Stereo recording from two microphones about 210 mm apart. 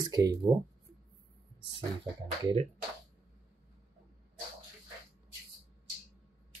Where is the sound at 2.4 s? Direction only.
25° right (ahead or behind).